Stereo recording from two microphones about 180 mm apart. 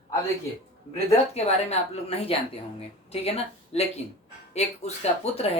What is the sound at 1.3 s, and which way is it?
Speech, 35° left (ahead or behind).